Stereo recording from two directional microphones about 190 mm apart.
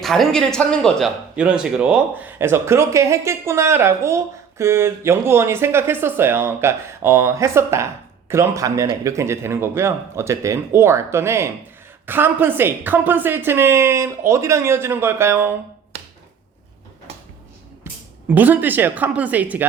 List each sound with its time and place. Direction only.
0.0 s speech: centre (ahead or behind)
18.3 s speech: 10° right (ahead or behind)